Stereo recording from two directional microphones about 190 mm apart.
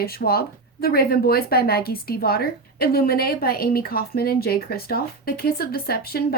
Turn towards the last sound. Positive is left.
turn(degrees=55)  # may be behind; listen again after turning